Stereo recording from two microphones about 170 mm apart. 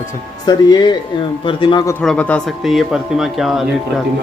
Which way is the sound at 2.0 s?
5° left (ahead or behind).